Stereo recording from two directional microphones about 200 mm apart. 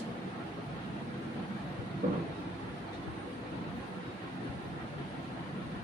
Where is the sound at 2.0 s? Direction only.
45° right (ahead or behind).